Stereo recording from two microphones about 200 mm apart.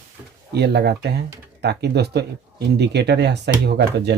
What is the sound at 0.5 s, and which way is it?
Speech, 55° right (ahead or behind).